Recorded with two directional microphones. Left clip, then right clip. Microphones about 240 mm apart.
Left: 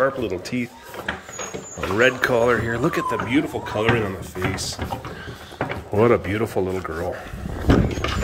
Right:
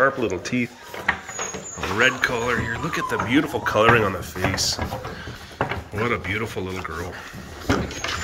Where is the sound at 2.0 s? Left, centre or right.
Centre.